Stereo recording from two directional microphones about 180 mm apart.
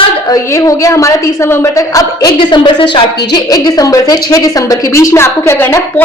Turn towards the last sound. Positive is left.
turn(degrees=15)  # may be behind; listen again after turning